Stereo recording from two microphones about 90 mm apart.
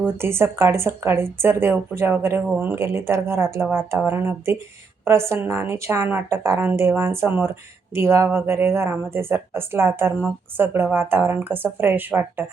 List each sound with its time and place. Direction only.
0.0 s speech: 30° right (ahead or behind)